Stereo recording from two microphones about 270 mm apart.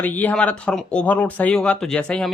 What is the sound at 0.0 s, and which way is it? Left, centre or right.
Speech, centre.